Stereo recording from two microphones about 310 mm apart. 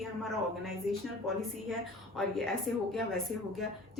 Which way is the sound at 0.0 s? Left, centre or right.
Centre.